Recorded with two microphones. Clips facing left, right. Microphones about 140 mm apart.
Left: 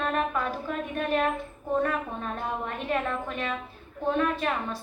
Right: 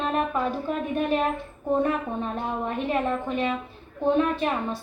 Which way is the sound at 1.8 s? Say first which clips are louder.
Right 1 dB; 25° right (ahead or behind).